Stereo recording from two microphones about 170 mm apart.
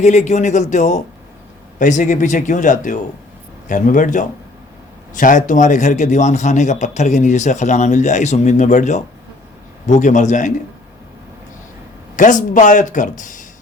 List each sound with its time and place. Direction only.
0.0 s a man's voice: 40° left (ahead or behind)
12.1 s a man's voice: 50° left (ahead or behind)